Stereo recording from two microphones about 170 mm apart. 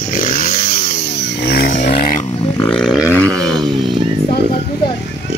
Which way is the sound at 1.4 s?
60° left (ahead or behind).